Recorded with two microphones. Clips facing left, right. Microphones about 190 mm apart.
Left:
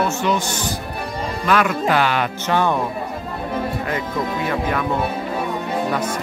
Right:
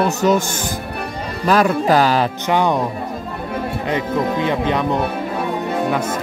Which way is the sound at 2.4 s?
15° right (ahead or behind).